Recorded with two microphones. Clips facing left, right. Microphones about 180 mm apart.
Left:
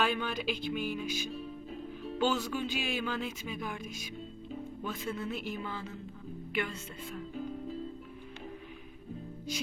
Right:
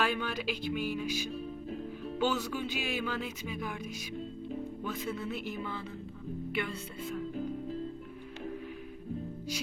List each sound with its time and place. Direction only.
0.0 s music: centre (ahead or behind)
2.1 s music: 5° right (ahead or behind)
4.8 s music: centre (ahead or behind)